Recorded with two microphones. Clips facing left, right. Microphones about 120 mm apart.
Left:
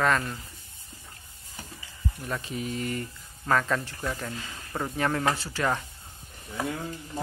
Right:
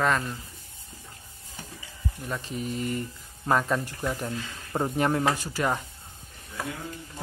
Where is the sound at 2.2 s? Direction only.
Centre (ahead or behind).